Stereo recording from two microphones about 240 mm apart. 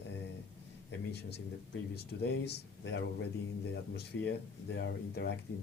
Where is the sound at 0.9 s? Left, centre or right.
Left.